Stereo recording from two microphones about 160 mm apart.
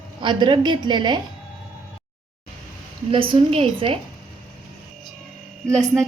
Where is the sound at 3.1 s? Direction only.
35° right (ahead or behind).